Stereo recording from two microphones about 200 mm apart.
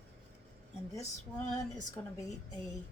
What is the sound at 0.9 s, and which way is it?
Speech, 15° left (ahead or behind).